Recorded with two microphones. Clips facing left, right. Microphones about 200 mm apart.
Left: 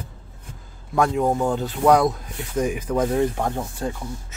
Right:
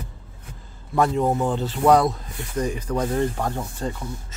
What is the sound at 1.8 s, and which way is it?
Speech, centre (ahead or behind).